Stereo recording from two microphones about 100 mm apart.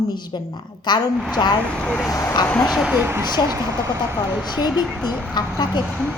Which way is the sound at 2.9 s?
20° right (ahead or behind).